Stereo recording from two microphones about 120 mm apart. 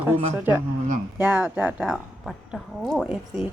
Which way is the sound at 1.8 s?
Centre (ahead or behind).